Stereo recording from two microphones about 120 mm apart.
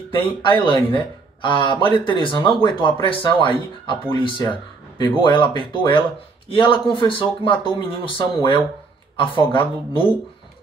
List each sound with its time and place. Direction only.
0.1 s speech: 45° left (ahead or behind)